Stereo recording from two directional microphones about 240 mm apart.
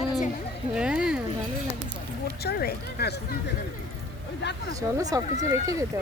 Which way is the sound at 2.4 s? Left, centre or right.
Left.